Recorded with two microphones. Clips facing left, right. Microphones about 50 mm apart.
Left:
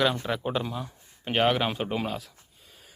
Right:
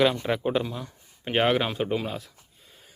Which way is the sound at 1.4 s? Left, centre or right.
Centre.